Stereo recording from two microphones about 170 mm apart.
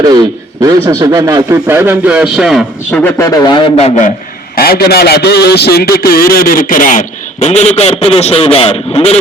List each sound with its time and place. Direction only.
0.0 s a man's voice: 20° right (ahead or behind); by 2.6 s 5° right (ahead or behind)
2.9 s a man's voice: 10° left (ahead or behind); by 4.1 s 40° left (ahead or behind)
4.5 s a man's voice: 65° left (ahead or behind)
7.4 s a man's voice: 40° left (ahead or behind)